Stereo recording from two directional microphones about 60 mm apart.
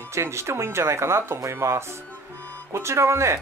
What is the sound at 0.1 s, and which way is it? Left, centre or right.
Speech, right.